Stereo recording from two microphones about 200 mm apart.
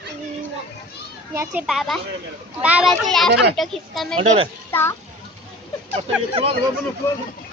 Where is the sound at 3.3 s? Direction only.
60° right (ahead or behind).